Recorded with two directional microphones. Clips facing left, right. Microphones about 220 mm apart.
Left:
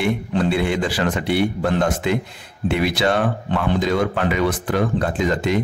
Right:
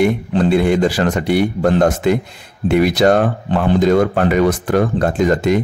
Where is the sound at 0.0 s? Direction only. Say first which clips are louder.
Right 5 dB; 40° right (ahead or behind).